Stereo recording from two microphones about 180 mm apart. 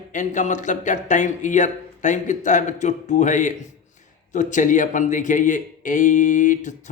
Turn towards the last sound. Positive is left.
turn(degrees=45)  # may be behind; listen again after turning